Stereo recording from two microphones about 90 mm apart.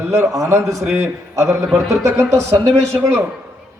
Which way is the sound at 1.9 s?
30° right (ahead or behind).